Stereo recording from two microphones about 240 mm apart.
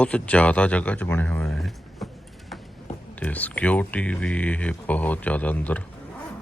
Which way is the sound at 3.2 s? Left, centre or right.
Centre.